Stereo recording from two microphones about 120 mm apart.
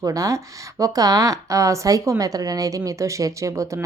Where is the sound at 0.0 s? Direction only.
30° right (ahead or behind).